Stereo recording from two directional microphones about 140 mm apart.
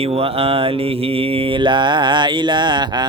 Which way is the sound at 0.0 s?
45° right (ahead or behind).